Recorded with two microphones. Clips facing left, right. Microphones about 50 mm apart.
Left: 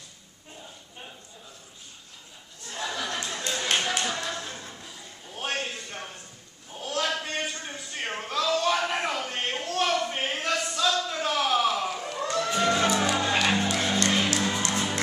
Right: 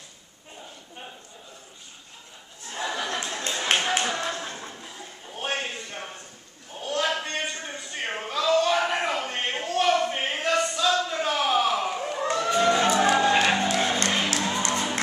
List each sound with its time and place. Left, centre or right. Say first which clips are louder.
2.7 s a sound: right 2 dB; centre
12.4 s music: right 4 dB; centre
12.8 s music: right 3 dB; right
13.1 s music: right 5 dB; centre
13.7 s music: right 1 dB; right